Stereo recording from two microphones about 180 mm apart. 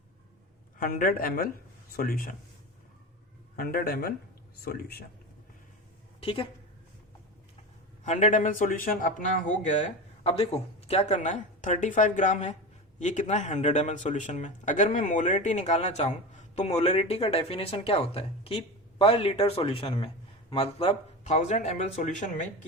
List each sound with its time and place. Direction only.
0.8 s speech: 50° left (ahead or behind)
3.5 s a man's voice: 55° left (ahead or behind)
6.1 s a woman's voice: 30° left (ahead or behind)
8.0 s speech: 40° left (ahead or behind)
10.2 s speech: 30° left (ahead or behind)